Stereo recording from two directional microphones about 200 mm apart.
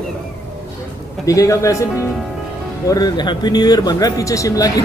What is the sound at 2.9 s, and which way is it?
Speech, 20° left (ahead or behind).